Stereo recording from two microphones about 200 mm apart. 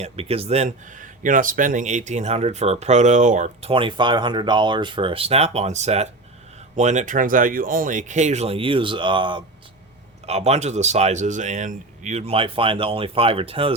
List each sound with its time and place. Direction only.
0.0 s speech: 30° right (ahead or behind)